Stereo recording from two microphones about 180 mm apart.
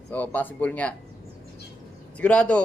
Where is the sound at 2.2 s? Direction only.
10° left (ahead or behind).